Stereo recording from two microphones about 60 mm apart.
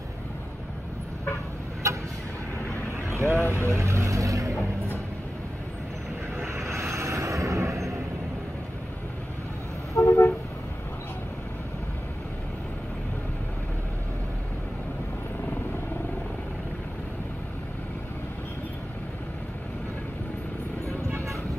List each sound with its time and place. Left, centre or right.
1.8 s vehicle: right
3.1 s vehicle: right
3.3 s speech: left
3.7 s vehicle: right
6.3 s vehicle: right
10.0 s vehicle: left